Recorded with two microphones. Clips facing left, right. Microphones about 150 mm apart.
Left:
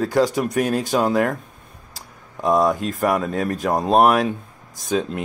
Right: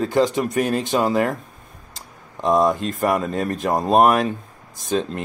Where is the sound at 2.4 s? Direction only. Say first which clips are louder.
Even; 5° left (ahead or behind).